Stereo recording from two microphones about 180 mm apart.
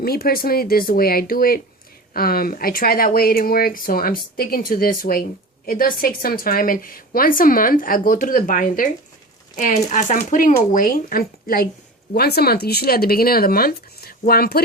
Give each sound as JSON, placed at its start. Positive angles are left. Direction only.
{"t": 0.0, "sound": "a woman's voice", "side_deg": 55}